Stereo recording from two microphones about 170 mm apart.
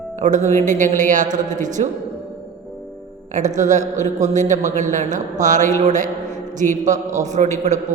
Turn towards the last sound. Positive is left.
turn(degrees=-45)  # may be behind; listen again after turning